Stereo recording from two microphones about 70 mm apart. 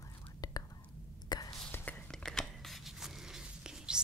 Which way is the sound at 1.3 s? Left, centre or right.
Left.